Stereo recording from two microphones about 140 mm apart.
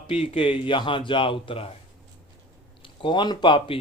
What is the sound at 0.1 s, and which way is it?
Speech, 45° left (ahead or behind).